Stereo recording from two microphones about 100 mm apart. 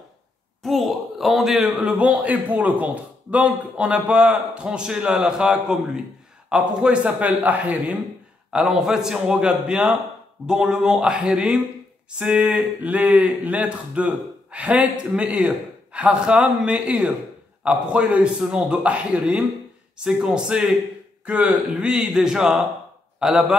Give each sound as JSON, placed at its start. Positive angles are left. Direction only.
{"t": 0.6, "sound": "a man's voice", "side_deg": 0}
{"t": 8.5, "sound": "a man's voice", "side_deg": -5}
{"t": 23.1, "sound": "a sound", "side_deg": -5}